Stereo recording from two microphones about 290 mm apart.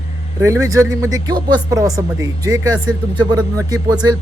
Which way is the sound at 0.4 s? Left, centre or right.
Centre.